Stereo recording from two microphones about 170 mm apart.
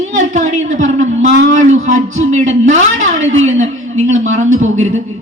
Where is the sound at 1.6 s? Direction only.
45° right (ahead or behind).